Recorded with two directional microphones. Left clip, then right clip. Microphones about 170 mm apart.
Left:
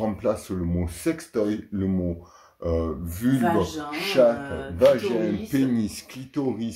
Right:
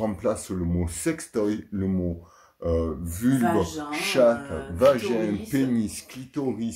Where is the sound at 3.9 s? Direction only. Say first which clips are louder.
Left 1 dB; 35° right (ahead or behind).